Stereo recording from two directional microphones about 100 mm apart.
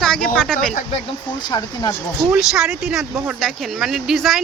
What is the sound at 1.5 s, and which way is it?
Speech, 45° left (ahead or behind).